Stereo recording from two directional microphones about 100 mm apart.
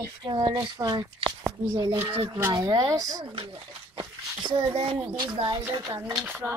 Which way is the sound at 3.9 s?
50° right (ahead or behind).